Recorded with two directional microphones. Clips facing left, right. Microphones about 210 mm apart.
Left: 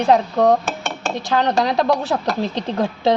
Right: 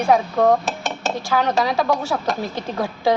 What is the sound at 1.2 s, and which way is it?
Speech, 20° left (ahead or behind).